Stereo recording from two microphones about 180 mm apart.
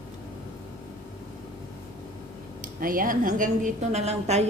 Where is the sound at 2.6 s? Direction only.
50° right (ahead or behind).